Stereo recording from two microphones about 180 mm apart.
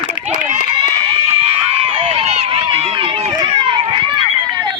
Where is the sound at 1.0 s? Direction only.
35° right (ahead or behind).